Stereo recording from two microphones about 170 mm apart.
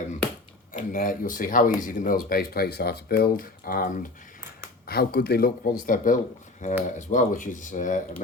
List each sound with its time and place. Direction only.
0.7 s speech: 55° left (ahead or behind)
4.9 s speech: 70° left (ahead or behind); by 8.0 s 50° left (ahead or behind)